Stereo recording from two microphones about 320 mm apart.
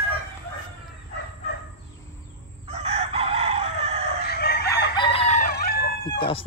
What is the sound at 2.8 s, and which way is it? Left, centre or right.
Chicken, centre.